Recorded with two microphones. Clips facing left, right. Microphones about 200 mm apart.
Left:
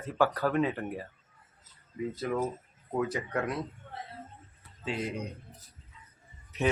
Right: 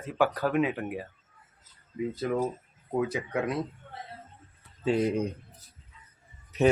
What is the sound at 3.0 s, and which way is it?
Speech, 15° right (ahead or behind).